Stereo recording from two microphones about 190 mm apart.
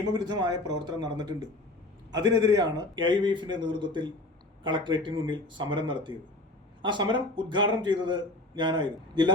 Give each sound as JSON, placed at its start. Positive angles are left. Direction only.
{"t": 0.1, "sound": "a man's voice", "side_deg": -20}